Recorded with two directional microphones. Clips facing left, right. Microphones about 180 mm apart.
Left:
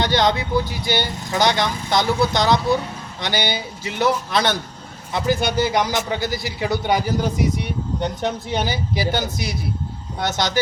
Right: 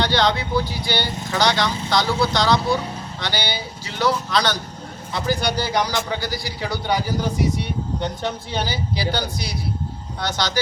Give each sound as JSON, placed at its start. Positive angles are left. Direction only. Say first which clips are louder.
{"t": 0.0, "sound": "speech", "louder": "left 1 dB", "side_deg": 20}
{"t": 8.2, "sound": "speech", "louder": "left 3 dB", "side_deg": 20}